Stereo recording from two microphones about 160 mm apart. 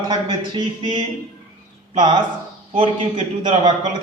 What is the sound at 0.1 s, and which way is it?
Speech, 30° right (ahead or behind).